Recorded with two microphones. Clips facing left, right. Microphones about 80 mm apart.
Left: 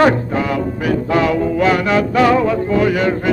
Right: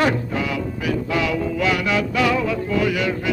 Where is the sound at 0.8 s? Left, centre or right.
Left.